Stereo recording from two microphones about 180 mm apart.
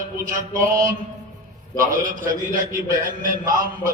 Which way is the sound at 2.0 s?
45° right (ahead or behind).